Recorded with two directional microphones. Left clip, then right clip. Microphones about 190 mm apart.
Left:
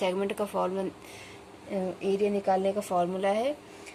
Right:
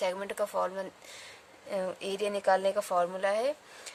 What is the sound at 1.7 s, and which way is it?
A woman's voice, 50° right (ahead or behind).